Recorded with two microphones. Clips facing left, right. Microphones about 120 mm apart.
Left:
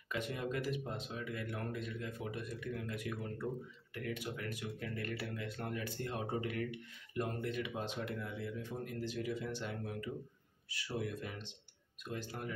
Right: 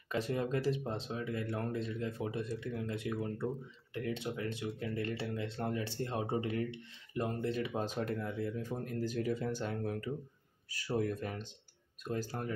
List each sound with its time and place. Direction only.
0.1 s speech: 30° right (ahead or behind)